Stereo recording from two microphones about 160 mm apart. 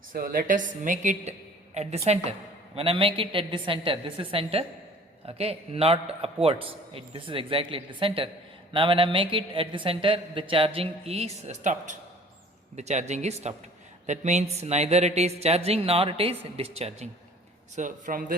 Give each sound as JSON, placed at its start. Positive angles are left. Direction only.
{"t": 0.1, "sound": "a woman's voice", "side_deg": -65}
{"t": 17.7, "sound": "a man's voice", "side_deg": -55}